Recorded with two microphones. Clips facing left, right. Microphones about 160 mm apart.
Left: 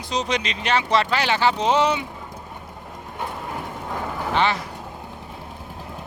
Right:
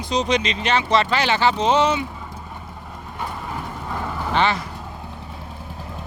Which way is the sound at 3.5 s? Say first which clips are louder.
Even; 15° left (ahead or behind).